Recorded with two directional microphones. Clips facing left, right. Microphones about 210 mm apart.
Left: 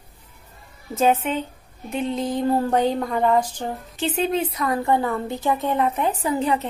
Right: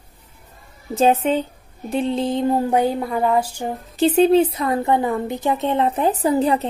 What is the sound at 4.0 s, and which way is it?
A woman's voice, 35° right (ahead or behind).